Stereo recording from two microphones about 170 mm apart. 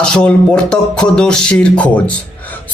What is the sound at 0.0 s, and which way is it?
Speech, 5° left (ahead or behind).